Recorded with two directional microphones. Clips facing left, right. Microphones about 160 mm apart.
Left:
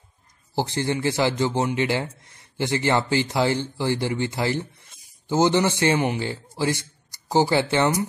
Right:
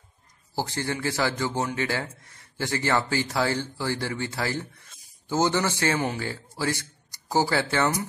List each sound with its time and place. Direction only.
0.6 s a man's voice: 20° left (ahead or behind)